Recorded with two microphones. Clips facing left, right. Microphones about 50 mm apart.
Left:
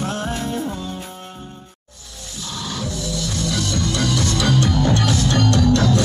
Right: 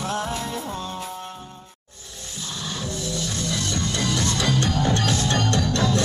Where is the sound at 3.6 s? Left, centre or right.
Right.